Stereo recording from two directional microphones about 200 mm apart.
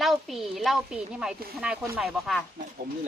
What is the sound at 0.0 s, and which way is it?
A woman's voice, centre (ahead or behind).